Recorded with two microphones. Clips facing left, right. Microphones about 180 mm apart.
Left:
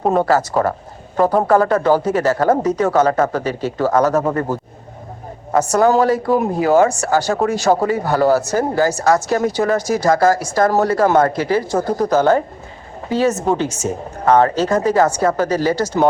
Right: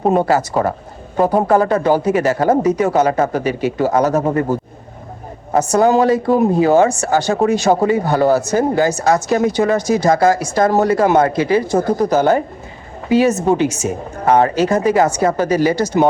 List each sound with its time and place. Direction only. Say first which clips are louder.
0.1 s speech: even; 15° right (ahead or behind)
1.5 s speech: even; 20° right (ahead or behind)
5.5 s speech: right 1 dB; 20° right (ahead or behind)